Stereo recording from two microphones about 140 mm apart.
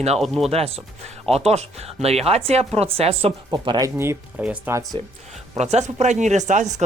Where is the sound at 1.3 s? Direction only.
50° right (ahead or behind).